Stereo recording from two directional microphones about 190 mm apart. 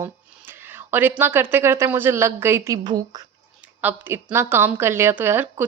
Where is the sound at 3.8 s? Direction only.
10° right (ahead or behind).